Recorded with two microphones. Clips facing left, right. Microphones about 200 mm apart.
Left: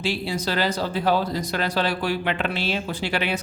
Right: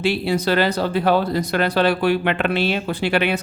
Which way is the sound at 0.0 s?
60° right (ahead or behind).